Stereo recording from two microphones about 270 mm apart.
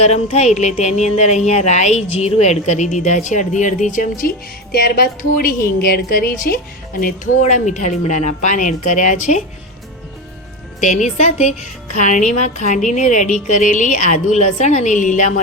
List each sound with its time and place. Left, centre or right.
0.0 s a woman's voice: left
10.8 s a woman's voice: left